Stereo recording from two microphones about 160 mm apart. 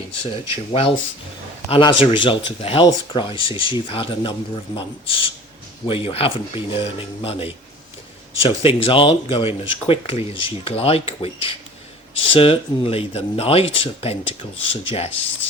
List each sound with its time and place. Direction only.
0.7 s speech: 35° left (ahead or behind)